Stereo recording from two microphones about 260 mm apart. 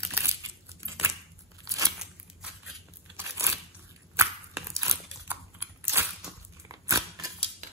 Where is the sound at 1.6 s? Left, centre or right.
Centre.